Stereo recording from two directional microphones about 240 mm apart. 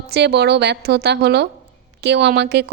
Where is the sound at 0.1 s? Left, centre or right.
Right.